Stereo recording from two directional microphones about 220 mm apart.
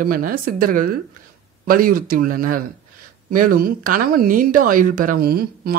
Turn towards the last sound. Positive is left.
turn(degrees=-45)  # may be behind; listen again after turning